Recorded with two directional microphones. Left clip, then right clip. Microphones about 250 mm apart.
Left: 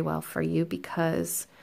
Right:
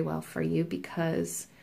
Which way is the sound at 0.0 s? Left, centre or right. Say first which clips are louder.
Left 2 dB; left.